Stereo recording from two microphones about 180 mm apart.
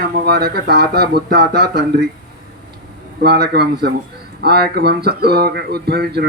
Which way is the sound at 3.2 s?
65° right (ahead or behind).